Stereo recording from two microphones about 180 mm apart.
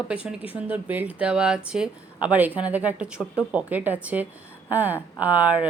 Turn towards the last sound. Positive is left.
turn(degrees=-10)  # may be behind; listen again after turning